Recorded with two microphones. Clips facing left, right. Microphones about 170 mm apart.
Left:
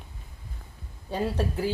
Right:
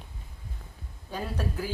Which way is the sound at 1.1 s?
30° left (ahead or behind).